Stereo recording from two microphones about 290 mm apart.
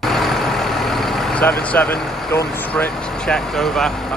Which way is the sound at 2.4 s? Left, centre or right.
Centre.